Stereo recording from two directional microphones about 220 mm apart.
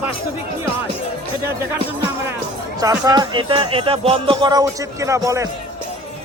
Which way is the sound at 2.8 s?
15° right (ahead or behind).